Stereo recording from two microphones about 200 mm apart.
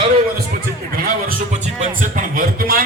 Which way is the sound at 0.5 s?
45° right (ahead or behind).